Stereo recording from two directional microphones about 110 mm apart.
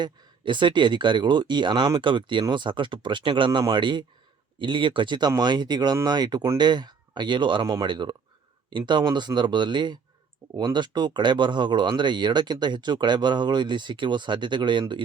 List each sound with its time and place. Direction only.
0.0 s speech: 45° right (ahead or behind)